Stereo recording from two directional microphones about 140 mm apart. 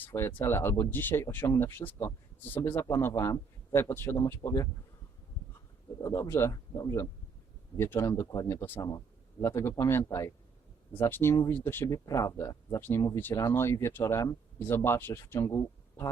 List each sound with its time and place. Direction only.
0.0 s speech: 15° left (ahead or behind)
6.0 s speech: 20° left (ahead or behind)